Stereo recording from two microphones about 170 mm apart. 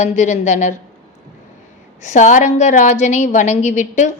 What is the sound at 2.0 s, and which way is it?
A woman's voice, 45° left (ahead or behind).